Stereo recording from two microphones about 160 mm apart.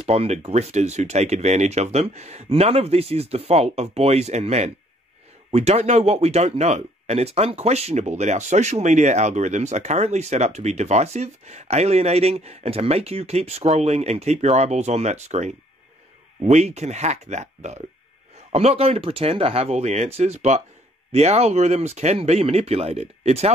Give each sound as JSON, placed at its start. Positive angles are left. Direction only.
{"t": 0.0, "sound": "speech", "side_deg": -40}